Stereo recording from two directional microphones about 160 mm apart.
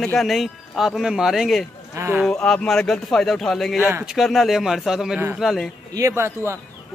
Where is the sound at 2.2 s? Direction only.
5° left (ahead or behind).